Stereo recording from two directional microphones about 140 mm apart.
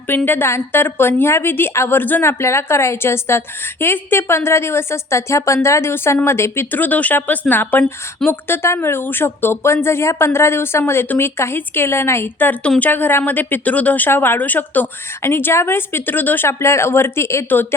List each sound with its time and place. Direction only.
0.3 s speech: 15° left (ahead or behind)